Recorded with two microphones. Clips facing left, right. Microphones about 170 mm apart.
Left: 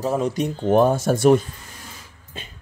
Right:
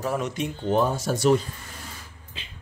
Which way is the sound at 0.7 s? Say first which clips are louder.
Left 6 dB; 55° left (ahead or behind).